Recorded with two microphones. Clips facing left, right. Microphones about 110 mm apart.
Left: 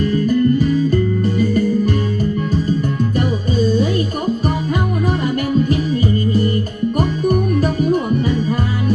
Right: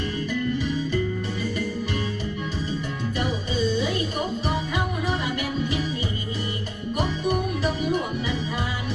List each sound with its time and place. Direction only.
0.0 s music: 45° left (ahead or behind)
3.2 s music: 45° left (ahead or behind)
5.6 s music: 50° left (ahead or behind)